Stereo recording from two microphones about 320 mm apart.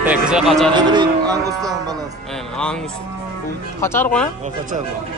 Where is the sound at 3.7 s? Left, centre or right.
Centre.